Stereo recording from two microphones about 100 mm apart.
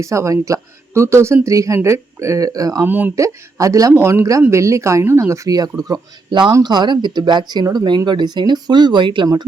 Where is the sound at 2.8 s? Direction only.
20° right (ahead or behind).